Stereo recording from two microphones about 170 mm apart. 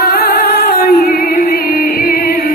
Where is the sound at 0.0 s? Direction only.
60° left (ahead or behind).